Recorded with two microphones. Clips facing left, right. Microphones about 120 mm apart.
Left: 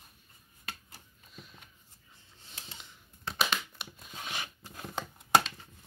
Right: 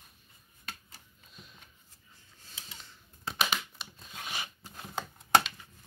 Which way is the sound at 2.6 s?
15° left (ahead or behind).